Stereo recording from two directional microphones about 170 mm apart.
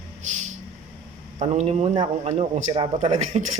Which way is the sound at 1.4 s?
40° right (ahead or behind).